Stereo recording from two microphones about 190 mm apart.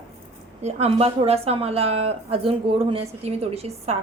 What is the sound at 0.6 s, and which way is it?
A woman's voice, 35° right (ahead or behind).